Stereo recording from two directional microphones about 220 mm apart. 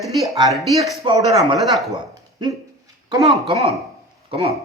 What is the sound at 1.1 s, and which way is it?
Speech, 20° right (ahead or behind).